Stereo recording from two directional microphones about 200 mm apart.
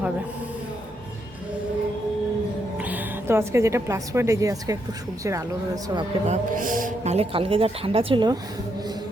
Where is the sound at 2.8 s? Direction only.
10° right (ahead or behind).